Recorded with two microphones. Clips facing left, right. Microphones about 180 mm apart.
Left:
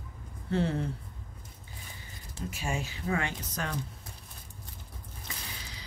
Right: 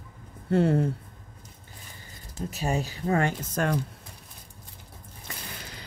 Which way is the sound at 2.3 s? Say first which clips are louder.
Right 6 dB; 40° right (ahead or behind).